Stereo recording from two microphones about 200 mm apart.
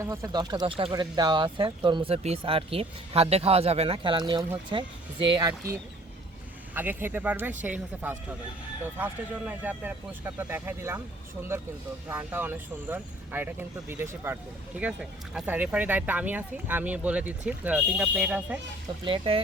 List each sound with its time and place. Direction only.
0.0 s speech: 15° right (ahead or behind)
12.0 s speech: 10° right (ahead or behind)
19.0 s speech: 25° right (ahead or behind)